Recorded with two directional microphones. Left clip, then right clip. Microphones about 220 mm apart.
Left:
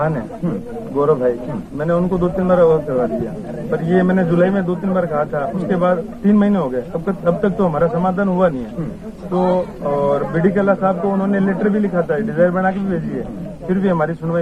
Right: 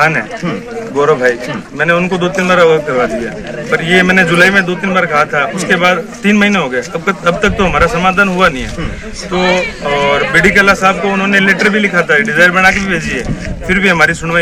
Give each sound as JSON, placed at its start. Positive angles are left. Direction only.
{"t": 0.9, "sound": "a man's voice", "side_deg": -25}
{"t": 9.9, "sound": "a man's voice", "side_deg": -30}